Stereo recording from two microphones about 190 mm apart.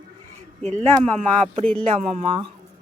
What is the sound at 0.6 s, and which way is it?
Speech, 35° right (ahead or behind).